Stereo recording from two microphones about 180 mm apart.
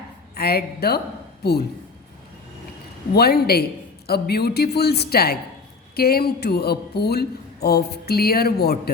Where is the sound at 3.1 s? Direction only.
60° left (ahead or behind).